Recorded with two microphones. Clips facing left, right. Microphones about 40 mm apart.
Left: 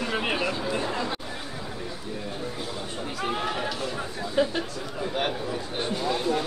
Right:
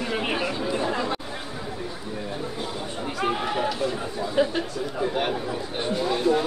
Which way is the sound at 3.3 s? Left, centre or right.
Centre.